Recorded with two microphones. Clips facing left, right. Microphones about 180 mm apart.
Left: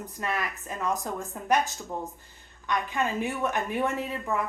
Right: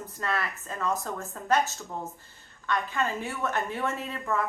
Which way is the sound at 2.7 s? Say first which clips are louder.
Left 1 dB; 15° left (ahead or behind).